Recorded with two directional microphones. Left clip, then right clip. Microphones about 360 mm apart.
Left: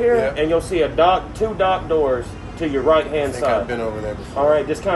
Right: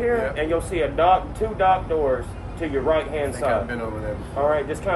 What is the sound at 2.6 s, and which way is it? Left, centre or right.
Speech, left.